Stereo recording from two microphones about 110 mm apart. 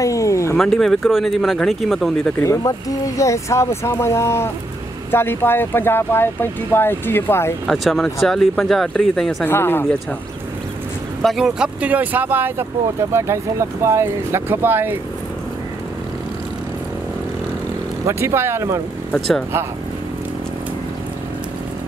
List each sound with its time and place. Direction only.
0.0 s a sound: 30° left (ahead or behind)
0.6 s speech: centre (ahead or behind)
2.4 s speech: 30° left (ahead or behind)
7.6 s speech: centre (ahead or behind)
9.4 s speech: 20° left (ahead or behind)
11.2 s speech: 5° right (ahead or behind)
18.0 s speech: 25° right (ahead or behind)
19.1 s speech: 5° left (ahead or behind)